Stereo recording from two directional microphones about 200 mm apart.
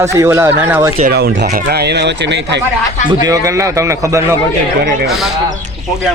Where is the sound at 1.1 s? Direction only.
55° right (ahead or behind).